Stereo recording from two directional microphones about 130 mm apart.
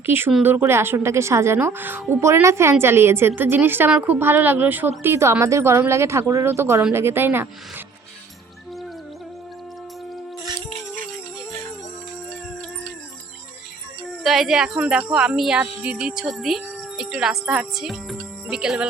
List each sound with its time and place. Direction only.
0.0 s a woman's voice: 15° right (ahead or behind)
14.3 s speech: centre (ahead or behind)